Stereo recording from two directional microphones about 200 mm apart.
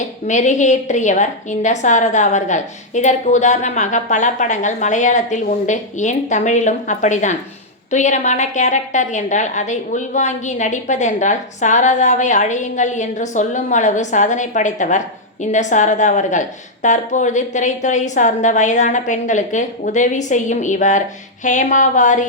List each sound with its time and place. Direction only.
0.3 s a woman's voice: 35° left (ahead or behind)